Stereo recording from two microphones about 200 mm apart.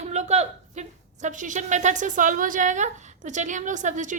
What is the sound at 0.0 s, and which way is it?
A woman's voice, 35° right (ahead or behind).